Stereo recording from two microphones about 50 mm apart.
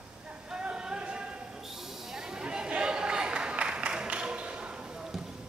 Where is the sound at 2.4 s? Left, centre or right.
Centre.